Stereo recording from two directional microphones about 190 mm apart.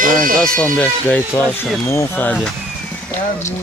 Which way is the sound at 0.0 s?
45° right (ahead or behind).